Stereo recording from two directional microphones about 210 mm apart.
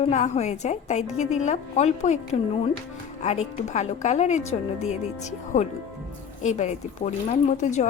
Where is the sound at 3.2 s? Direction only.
35° left (ahead or behind).